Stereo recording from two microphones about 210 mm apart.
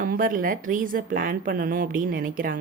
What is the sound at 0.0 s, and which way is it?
Speech, 40° right (ahead or behind).